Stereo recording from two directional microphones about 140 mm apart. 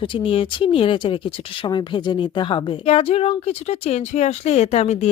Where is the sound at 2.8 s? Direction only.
45° left (ahead or behind).